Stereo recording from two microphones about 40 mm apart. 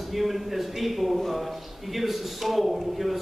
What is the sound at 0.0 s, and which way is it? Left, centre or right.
A man's voice, centre.